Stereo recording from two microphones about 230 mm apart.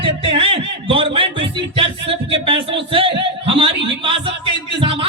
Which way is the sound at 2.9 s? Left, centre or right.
Right.